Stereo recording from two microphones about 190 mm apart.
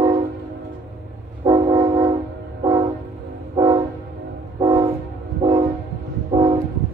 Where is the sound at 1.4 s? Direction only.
20° right (ahead or behind).